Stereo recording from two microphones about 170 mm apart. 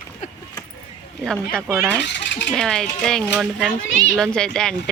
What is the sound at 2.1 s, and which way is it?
Speech, 90° left.